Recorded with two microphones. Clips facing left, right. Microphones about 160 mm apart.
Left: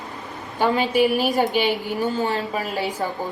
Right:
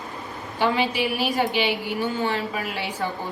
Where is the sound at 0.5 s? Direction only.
45° left (ahead or behind).